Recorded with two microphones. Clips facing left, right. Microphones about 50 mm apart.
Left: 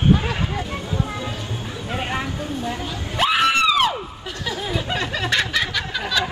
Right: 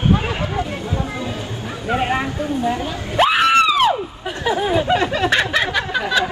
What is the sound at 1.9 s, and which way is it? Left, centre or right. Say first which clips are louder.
Screaming: right 7 dB; centre.